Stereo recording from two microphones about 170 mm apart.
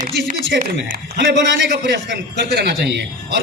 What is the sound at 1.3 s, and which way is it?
A man's voice, 90° right.